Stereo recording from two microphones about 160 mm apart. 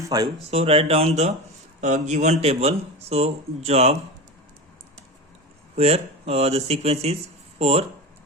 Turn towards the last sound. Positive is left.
turn(degrees=-40)  # may be behind; listen again after turning